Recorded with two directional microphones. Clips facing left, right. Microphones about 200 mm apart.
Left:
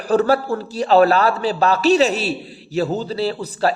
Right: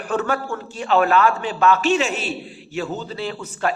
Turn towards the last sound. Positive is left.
turn(degrees=35)  # may be behind; listen again after turning